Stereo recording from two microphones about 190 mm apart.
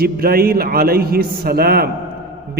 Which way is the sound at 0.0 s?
55° right (ahead or behind).